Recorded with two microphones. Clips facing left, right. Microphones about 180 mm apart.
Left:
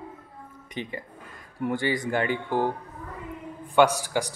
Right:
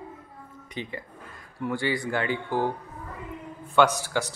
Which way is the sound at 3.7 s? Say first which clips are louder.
Left 1 dB; 10° left (ahead or behind).